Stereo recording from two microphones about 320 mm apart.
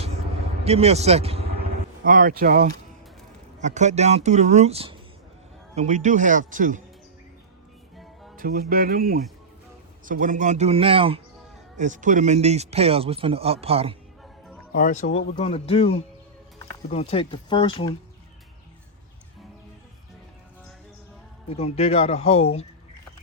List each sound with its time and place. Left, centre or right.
0.6 s a man's voice: centre
8.4 s music: right
8.7 s speech: right
14.7 s speech: left
21.5 s speech: centre